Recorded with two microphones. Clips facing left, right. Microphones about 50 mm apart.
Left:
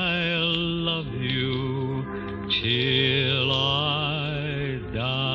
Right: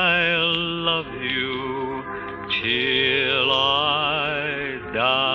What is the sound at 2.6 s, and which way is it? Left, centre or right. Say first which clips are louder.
Music: right 3 dB; right.